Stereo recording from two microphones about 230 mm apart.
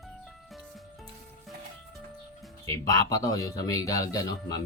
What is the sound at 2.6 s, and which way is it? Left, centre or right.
Speech, centre.